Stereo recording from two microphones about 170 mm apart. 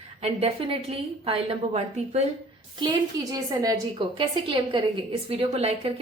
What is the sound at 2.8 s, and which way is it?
A woman's voice, 25° right (ahead or behind).